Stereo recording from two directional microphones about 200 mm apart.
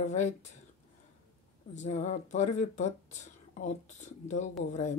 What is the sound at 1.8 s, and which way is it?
Speech, 35° left (ahead or behind).